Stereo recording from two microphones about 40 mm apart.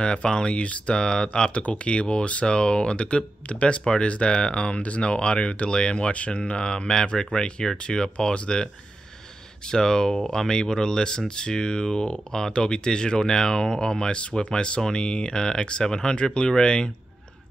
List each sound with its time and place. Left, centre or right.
0.0 s speech: left
9.7 s speech: centre